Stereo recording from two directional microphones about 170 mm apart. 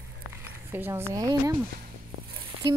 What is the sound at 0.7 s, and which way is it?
Speech, 15° right (ahead or behind).